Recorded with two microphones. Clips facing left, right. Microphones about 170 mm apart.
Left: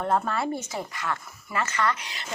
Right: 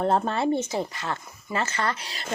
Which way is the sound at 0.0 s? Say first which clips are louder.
Right 3 dB; 30° right (ahead or behind).